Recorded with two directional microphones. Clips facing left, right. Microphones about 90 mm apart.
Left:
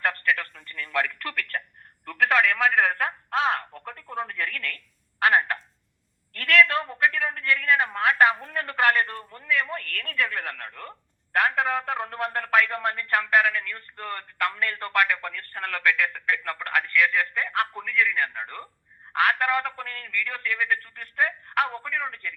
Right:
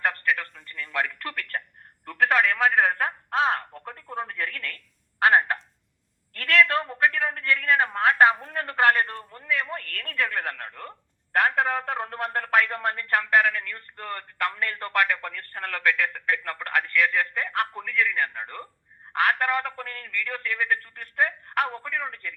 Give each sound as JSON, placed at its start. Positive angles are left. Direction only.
{"t": 0.0, "sound": "telephone", "side_deg": -20}
{"t": 1.0, "sound": "speech", "side_deg": -30}
{"t": 11.3, "sound": "speech", "side_deg": -40}